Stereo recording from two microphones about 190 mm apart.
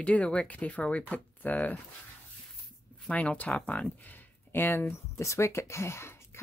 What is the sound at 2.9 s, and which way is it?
Speech, 5° left (ahead or behind).